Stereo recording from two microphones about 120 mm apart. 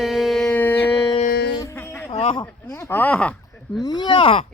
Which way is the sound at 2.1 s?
45° left (ahead or behind).